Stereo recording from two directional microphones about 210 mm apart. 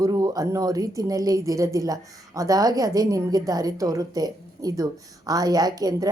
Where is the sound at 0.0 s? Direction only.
15° right (ahead or behind).